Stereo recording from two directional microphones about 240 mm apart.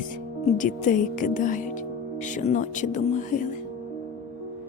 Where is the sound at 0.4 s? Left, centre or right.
Left.